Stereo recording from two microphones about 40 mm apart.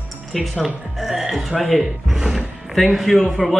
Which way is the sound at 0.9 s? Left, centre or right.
Centre.